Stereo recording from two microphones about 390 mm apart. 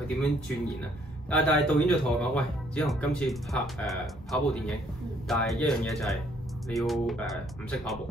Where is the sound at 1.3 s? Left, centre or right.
Centre.